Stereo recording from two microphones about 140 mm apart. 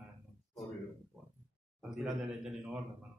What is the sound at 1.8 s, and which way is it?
Speech, centre (ahead or behind).